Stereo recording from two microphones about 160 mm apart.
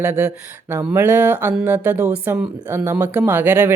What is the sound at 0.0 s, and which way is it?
Speech, 15° right (ahead or behind).